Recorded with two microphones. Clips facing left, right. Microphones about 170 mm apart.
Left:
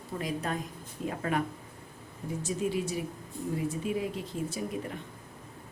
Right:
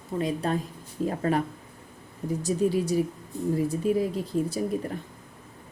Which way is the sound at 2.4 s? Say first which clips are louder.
Right 6 dB; 40° right (ahead or behind).